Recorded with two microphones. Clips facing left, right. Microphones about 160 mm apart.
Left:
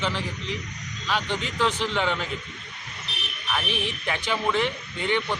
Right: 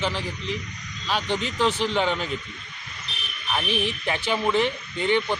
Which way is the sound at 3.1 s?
70° left (ahead or behind).